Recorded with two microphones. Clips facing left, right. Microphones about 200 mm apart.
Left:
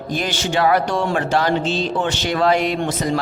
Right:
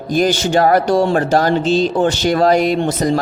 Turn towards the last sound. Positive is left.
turn(degrees=-35)  # may be behind; listen again after turning